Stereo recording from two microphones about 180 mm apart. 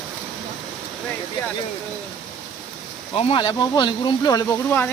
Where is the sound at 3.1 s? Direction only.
30° left (ahead or behind); by 4.8 s 15° left (ahead or behind).